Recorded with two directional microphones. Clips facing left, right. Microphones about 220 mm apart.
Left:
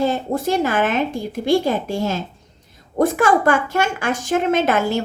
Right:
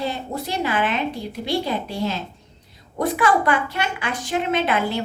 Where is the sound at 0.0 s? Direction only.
45° left (ahead or behind).